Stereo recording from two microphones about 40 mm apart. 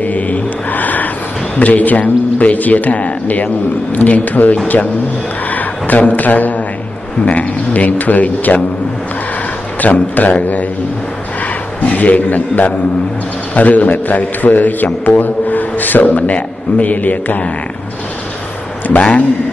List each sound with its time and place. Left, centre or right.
0.0 s mantra: left
1.6 s a man's voice: left
9.8 s a man's voice: left
11.8 s a man's voice: left
18.9 s a man's voice: left